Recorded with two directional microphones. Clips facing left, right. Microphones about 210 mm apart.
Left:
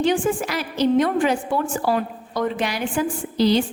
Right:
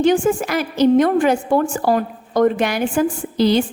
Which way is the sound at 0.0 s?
45° right (ahead or behind).